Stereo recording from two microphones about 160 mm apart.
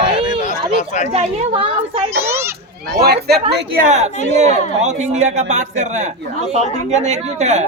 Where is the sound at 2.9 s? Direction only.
80° right.